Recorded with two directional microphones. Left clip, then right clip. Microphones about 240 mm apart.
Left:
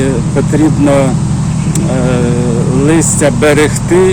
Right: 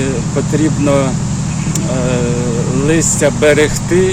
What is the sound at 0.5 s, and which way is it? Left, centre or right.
Speech, left.